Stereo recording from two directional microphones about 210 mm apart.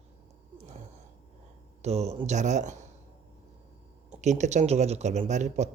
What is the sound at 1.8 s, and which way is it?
Speech, 30° right (ahead or behind).